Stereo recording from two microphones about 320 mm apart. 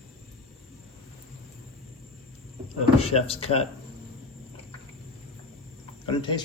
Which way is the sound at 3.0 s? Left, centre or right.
Centre.